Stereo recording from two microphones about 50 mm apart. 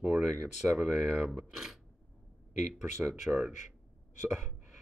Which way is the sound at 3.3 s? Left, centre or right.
Right.